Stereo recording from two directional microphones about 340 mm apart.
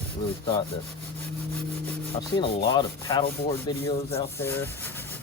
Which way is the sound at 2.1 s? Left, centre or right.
Centre.